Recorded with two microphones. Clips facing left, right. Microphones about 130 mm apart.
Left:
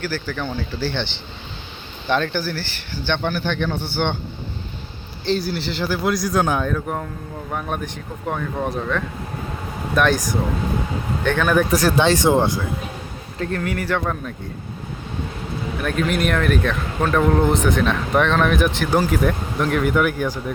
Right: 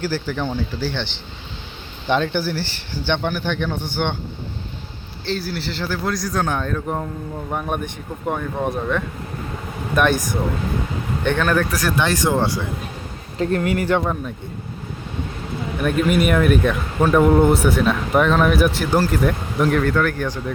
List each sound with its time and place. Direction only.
0.0 s speech: 25° right (ahead or behind)
0.8 s speech: 10° right (ahead or behind)
2.0 s speech: 20° right (ahead or behind)
5.4 s speech: centre (ahead or behind)
5.9 s a man's voice: 15° left (ahead or behind); by 7.1 s 5° right (ahead or behind)
8.3 s speech: 10° right (ahead or behind)
11.2 s speech: 15° right (ahead or behind)
11.4 s a man's voice: 10° left (ahead or behind)
11.7 s speech: 30° left (ahead or behind)
13.4 s speech: 25° right (ahead or behind)
14.0 s speech: 10° right (ahead or behind)
15.8 s speech: 5° right (ahead or behind)
19.8 s a man's voice: 10° left (ahead or behind)